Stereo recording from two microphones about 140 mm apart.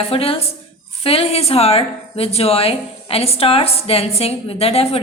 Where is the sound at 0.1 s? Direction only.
45° left (ahead or behind).